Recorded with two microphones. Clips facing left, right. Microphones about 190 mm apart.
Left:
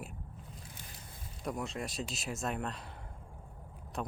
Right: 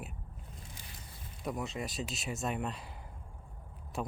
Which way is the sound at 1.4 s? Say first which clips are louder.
Even; centre (ahead or behind).